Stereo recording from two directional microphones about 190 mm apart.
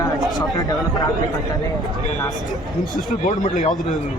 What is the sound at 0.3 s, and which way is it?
Speech, 20° left (ahead or behind).